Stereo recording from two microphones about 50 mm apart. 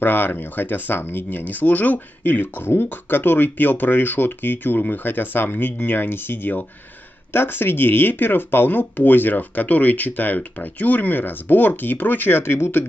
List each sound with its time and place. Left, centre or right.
0.0 s speech: left